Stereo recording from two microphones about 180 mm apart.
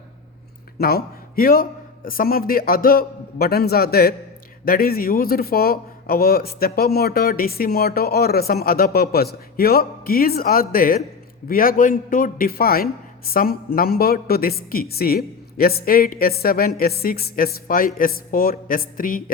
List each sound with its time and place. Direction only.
0.8 s a man's voice: 60° left (ahead or behind)